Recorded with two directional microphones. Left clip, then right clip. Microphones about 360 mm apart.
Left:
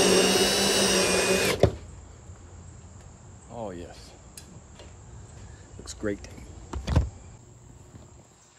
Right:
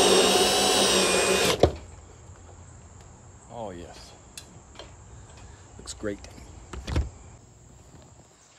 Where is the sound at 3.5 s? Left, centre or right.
Centre.